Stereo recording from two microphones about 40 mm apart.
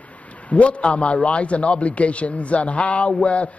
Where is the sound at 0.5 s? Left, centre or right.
Left.